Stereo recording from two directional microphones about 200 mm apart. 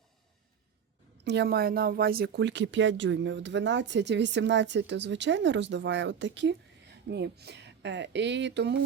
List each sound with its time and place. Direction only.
1.2 s speech: 55° right (ahead or behind)